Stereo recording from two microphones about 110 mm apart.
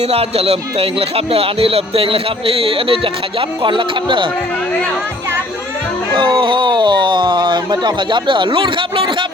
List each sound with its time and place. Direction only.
0.0 s speech: 65° right (ahead or behind); by 4.3 s 50° right (ahead or behind)
6.1 s speech: 50° right (ahead or behind)